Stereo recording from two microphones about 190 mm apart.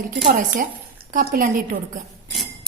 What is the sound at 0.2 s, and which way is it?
A woman's voice, 45° right (ahead or behind).